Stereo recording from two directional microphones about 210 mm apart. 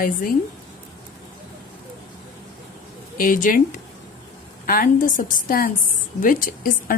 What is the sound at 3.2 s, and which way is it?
Speech, 40° left (ahead or behind).